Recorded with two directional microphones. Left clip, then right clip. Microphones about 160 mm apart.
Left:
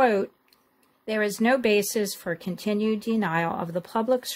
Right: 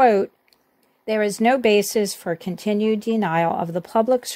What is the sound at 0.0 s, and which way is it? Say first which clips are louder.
Speech: right 6 dB; 40° right (ahead or behind).